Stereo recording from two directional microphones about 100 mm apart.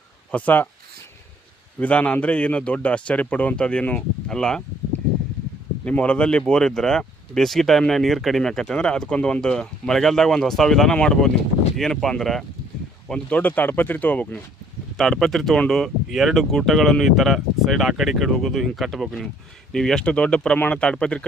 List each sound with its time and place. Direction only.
0.3 s a man's voice: 15° left (ahead or behind)
1.8 s a man's voice: 15° left (ahead or behind)
5.8 s a man's voice: 15° left (ahead or behind)
14.9 s a man's voice: 5° left (ahead or behind)